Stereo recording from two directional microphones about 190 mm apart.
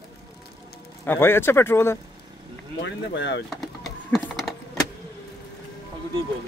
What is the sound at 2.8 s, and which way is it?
Speech, 70° left (ahead or behind).